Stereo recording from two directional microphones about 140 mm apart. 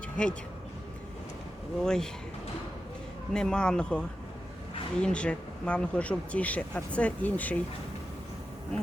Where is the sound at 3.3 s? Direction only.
5° left (ahead or behind).